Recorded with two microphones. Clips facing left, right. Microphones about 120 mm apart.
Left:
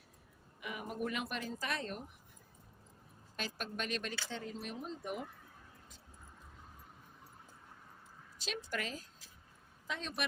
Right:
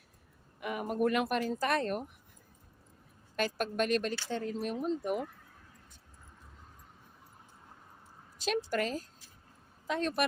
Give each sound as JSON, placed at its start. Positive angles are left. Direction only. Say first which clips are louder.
{"t": 0.6, "sound": "speech", "louder": "right 9 dB", "side_deg": -50}
{"t": 3.3, "sound": "speech", "louder": "right 10 dB", "side_deg": -55}
{"t": 8.4, "sound": "a woman's voice", "louder": "right 9 dB", "side_deg": -50}